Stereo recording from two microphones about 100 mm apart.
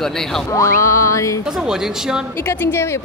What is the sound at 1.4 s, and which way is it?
Speech, 5° right (ahead or behind).